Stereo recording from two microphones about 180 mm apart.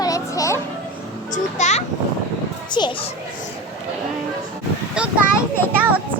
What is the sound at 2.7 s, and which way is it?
Speech, 25° left (ahead or behind).